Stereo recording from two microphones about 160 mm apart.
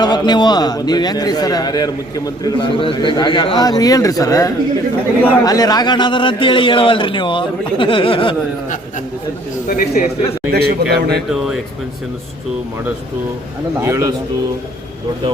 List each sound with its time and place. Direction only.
0.0 s a man's voice: 25° left (ahead or behind)
9.6 s a man's voice: 60° left (ahead or behind)
10.5 s a man's voice: 90° right
11.3 s speech: 5° right (ahead or behind)
13.8 s speech: 20° right (ahead or behind)